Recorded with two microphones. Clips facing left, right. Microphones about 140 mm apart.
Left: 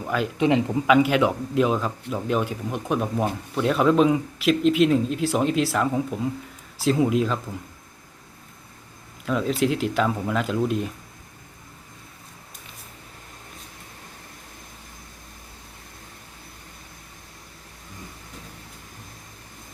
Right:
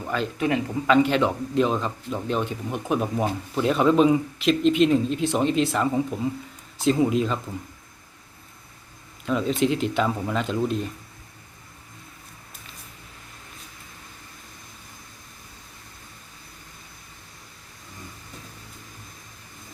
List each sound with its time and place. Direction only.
0.0 s speech: 5° left (ahead or behind)
0.3 s speech: 20° left (ahead or behind)
0.9 s a man's voice: 10° left (ahead or behind)
9.2 s a man's voice: centre (ahead or behind)